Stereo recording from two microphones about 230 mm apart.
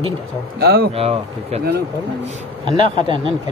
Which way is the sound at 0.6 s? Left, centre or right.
Right.